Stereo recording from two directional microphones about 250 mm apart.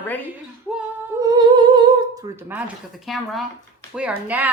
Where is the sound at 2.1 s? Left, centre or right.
Centre.